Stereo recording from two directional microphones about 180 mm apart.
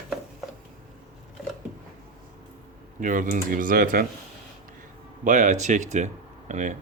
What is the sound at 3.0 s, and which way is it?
Speech, 45° right (ahead or behind).